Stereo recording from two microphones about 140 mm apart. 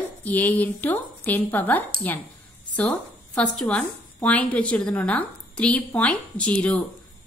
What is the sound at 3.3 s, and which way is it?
A woman's voice, 10° left (ahead or behind).